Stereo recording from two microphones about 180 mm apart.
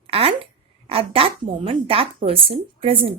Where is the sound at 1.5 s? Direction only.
30° right (ahead or behind).